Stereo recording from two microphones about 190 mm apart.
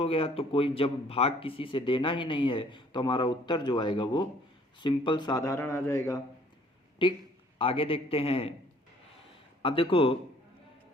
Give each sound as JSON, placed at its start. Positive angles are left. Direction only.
{"t": 0.0, "sound": "speech", "side_deg": 30}
{"t": 7.0, "sound": "a man's voice", "side_deg": 25}
{"t": 9.6, "sound": "speech", "side_deg": 30}